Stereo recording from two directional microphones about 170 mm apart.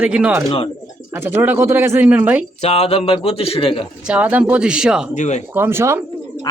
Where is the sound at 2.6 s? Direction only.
40° left (ahead or behind).